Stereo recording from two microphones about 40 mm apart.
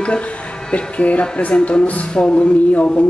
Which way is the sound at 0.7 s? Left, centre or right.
Left.